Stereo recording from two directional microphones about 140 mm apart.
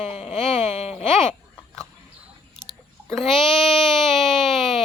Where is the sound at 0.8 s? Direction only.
50° left (ahead or behind).